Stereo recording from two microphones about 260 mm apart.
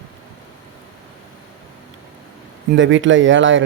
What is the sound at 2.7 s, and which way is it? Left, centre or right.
Speech, right.